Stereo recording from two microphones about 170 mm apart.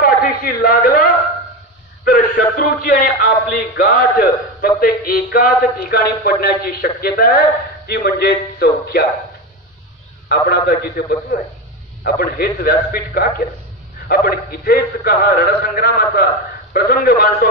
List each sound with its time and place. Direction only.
0.0 s a sound: 60° left (ahead or behind)
2.0 s a man's voice: 55° left (ahead or behind)
10.2 s a man's voice: 65° left (ahead or behind)